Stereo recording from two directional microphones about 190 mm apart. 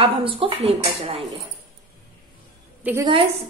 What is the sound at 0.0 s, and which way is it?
A woman's voice, 30° right (ahead or behind).